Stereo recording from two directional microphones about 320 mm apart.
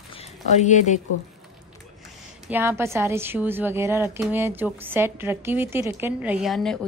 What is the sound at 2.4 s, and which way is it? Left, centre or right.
A woman's voice, centre.